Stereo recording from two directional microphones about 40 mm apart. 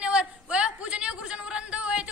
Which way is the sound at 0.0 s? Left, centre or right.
Right.